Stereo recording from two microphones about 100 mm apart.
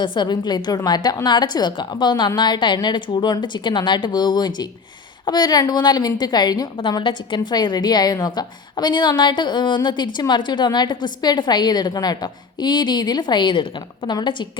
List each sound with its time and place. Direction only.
0.0 s a woman's voice: 50° left (ahead or behind)
6.9 s a woman's voice: 55° left (ahead or behind)